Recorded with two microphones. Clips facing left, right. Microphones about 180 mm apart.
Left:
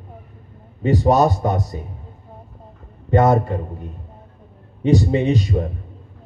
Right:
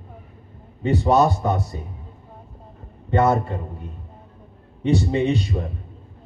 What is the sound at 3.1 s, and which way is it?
Speech, 40° left (ahead or behind).